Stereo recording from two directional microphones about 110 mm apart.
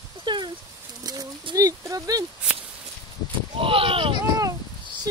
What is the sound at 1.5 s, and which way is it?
Speech, 30° right (ahead or behind).